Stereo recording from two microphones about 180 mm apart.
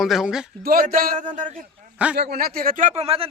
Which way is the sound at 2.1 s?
60° right (ahead or behind).